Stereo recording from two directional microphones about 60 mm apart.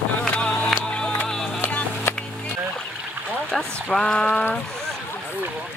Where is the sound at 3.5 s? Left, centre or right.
Centre.